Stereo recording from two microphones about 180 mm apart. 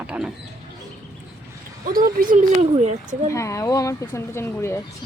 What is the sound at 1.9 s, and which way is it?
Speech, 50° right (ahead or behind).